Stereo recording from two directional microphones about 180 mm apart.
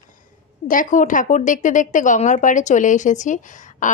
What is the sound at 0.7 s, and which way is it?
A woman's voice, 45° left (ahead or behind).